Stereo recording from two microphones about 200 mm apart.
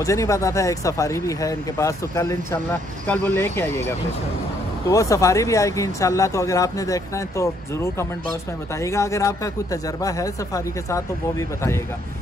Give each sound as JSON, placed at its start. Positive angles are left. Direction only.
{"t": 0.0, "sound": "speech", "side_deg": 15}
{"t": 4.8, "sound": "speech", "side_deg": 15}